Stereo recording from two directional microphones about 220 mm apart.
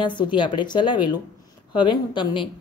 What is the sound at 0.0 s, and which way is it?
Speech, 20° left (ahead or behind).